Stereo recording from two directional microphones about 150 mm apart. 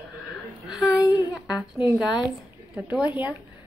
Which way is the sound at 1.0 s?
25° left (ahead or behind).